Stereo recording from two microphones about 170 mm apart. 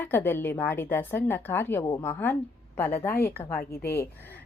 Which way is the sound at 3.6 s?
65° left (ahead or behind).